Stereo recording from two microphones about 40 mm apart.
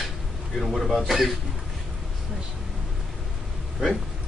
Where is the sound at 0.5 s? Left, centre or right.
Centre.